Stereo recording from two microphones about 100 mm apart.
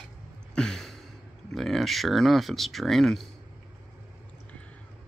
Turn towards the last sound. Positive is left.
turn(degrees=5)  # may be behind; listen again after turning